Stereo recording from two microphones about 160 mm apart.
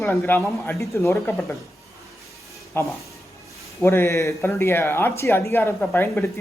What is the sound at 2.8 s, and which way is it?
Speech, 15° left (ahead or behind).